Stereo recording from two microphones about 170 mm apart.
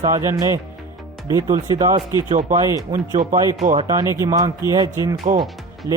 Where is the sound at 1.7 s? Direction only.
20° right (ahead or behind).